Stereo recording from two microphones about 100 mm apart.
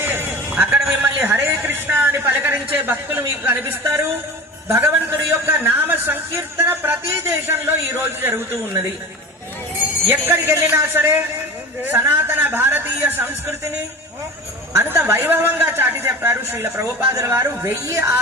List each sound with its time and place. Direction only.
0.0 s a sound: 20° right (ahead or behind)
3.5 s speech: 30° right (ahead or behind)
5.5 s speech: 20° right (ahead or behind)
10.1 s a man's voice: 20° right (ahead or behind)
14.7 s a man's voice: 25° right (ahead or behind)